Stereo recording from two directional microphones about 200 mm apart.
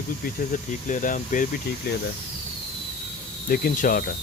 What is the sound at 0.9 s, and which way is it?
Speech, 40° left (ahead or behind).